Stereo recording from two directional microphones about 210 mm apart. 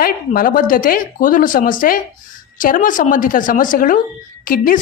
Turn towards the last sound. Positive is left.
turn(degrees=40)  # may be behind; listen again after turning